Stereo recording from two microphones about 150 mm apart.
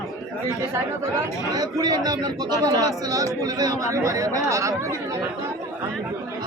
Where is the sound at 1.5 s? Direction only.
25° right (ahead or behind).